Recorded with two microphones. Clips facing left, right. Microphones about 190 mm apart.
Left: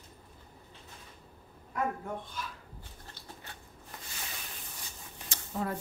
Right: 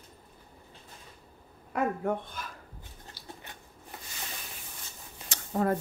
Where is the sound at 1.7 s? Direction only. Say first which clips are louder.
Right 5 dB; 60° right (ahead or behind).